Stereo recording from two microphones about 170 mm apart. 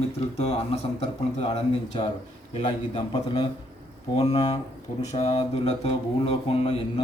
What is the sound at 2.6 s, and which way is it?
Mantra, 40° left (ahead or behind).